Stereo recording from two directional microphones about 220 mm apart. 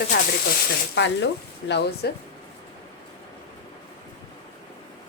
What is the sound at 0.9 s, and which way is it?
Speech, 50° left (ahead or behind).